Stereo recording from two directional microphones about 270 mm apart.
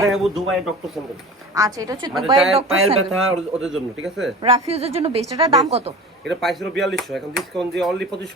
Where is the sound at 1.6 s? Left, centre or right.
Centre.